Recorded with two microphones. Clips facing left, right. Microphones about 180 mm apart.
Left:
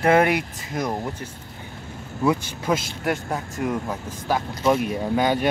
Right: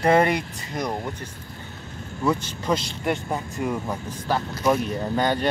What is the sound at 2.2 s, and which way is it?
Speech, 5° left (ahead or behind).